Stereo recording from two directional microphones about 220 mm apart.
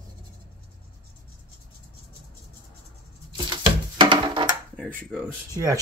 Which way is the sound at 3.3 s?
20° right (ahead or behind).